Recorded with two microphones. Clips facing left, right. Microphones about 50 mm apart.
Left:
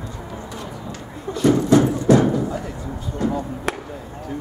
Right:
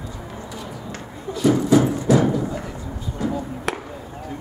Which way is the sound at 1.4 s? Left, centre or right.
Centre.